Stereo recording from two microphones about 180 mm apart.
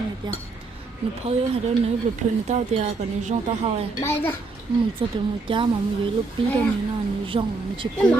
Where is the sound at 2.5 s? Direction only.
40° right (ahead or behind).